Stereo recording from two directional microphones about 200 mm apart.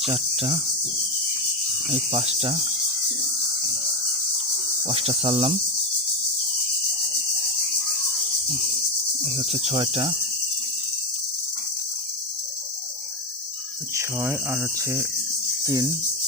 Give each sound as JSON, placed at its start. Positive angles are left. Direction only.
{"t": 0.0, "sound": "cricket", "side_deg": -30}
{"t": 1.9, "sound": "cricket", "side_deg": -30}
{"t": 4.9, "sound": "cricket", "side_deg": -30}
{"t": 9.2, "sound": "cricket", "side_deg": -25}
{"t": 13.9, "sound": "speech", "side_deg": -10}
{"t": 15.6, "sound": "cricket", "side_deg": -20}